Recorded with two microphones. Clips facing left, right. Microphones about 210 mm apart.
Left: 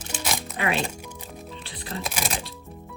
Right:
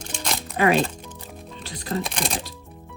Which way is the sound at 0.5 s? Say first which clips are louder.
Right 8 dB; 45° right (ahead or behind).